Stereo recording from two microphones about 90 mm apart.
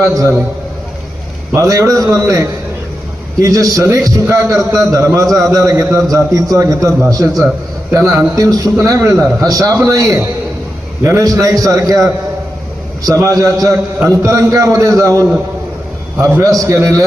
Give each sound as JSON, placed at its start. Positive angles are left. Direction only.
{"t": 0.0, "sound": "a man's voice", "side_deg": -40}
{"t": 1.5, "sound": "a man's voice", "side_deg": -35}
{"t": 13.1, "sound": "a man's voice", "side_deg": -40}
{"t": 16.6, "sound": "a man's voice", "side_deg": -35}